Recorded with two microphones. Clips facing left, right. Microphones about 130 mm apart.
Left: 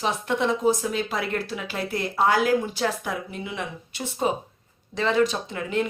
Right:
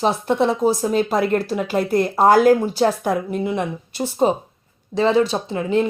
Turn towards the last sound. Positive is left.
turn(degrees=-30)  # may be behind; listen again after turning